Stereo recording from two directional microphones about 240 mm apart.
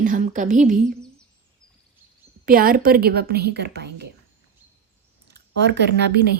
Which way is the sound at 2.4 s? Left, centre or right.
Right.